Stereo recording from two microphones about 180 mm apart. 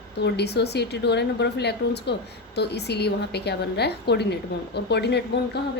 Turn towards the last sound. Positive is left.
turn(degrees=70)  # may be behind; listen again after turning